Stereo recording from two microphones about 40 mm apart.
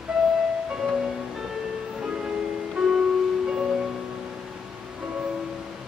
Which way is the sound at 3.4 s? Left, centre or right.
Centre.